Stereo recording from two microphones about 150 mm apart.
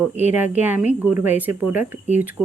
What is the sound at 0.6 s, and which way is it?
Speech, 10° right (ahead or behind).